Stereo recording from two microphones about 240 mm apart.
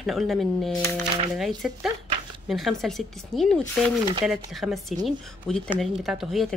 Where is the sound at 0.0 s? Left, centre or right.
Centre.